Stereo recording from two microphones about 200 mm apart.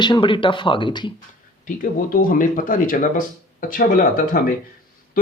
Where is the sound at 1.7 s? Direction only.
45° left (ahead or behind).